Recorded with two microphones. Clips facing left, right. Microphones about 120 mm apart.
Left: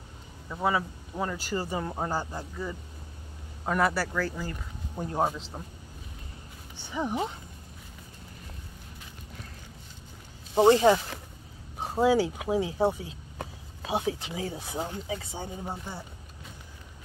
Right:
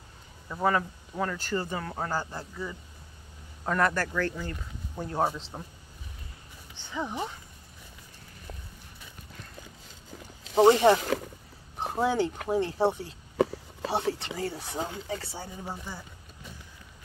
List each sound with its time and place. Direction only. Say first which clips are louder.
0.5 s speech: right 1 dB; 5° left (ahead or behind)
5.2 s speech: even; centre (ahead or behind)
6.8 s speech: left 3 dB; 15° left (ahead or behind)
10.6 s speech: even; centre (ahead or behind)
15.3 s speech: left 2 dB; 20° left (ahead or behind)